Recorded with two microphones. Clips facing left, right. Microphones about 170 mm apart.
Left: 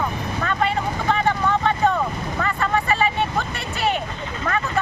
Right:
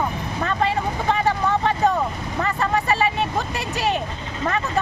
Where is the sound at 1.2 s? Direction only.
35° right (ahead or behind).